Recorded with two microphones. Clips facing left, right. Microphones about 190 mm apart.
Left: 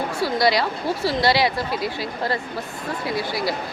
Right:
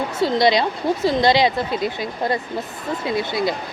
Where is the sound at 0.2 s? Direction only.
20° right (ahead or behind).